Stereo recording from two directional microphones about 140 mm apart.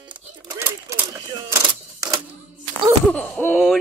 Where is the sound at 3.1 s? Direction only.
10° left (ahead or behind).